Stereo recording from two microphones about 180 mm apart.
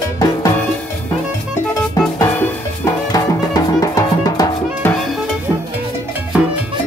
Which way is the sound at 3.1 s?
20° left (ahead or behind).